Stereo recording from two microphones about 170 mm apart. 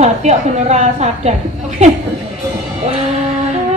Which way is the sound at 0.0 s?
40° right (ahead or behind).